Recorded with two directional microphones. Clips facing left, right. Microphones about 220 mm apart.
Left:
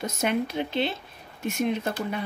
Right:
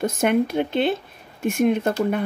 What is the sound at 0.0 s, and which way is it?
Speech, 50° right (ahead or behind).